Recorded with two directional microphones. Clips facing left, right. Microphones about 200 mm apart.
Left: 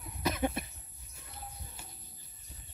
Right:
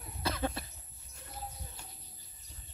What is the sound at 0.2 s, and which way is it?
Cough, 20° left (ahead or behind).